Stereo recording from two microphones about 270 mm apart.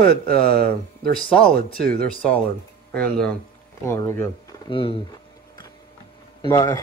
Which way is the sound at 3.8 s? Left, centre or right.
Centre.